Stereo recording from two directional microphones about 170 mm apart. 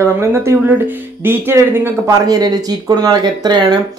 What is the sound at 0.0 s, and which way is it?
Speech, 15° right (ahead or behind).